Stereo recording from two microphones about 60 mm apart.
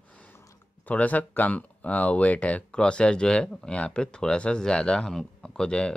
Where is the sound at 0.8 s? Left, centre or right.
Left.